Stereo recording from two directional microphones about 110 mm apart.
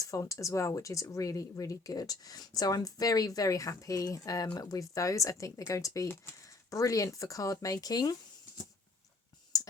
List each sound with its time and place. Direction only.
0.0 s speech: 30° left (ahead or behind)
9.5 s clicking: 35° left (ahead or behind)